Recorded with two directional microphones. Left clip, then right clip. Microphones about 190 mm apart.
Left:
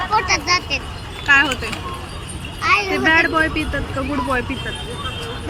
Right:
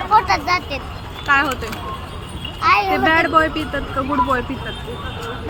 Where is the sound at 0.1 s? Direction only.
30° right (ahead or behind).